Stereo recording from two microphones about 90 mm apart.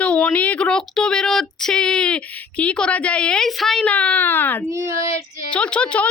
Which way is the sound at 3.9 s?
15° left (ahead or behind).